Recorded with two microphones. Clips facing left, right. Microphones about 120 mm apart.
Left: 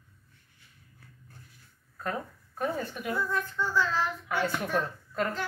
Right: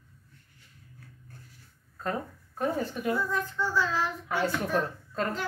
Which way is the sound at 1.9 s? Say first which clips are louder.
Right 2 dB; 25° right (ahead or behind).